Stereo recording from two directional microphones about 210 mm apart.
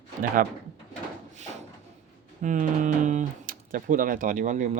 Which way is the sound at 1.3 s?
35° right (ahead or behind).